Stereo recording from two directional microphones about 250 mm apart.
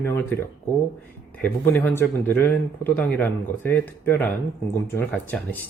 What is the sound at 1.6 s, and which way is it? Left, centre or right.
Speech, centre.